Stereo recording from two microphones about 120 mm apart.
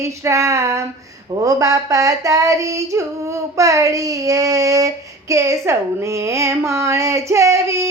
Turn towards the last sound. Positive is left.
turn(degrees=-25)  # may be behind; listen again after turning